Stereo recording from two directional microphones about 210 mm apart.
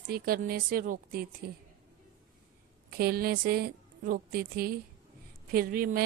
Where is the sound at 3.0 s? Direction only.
45° right (ahead or behind).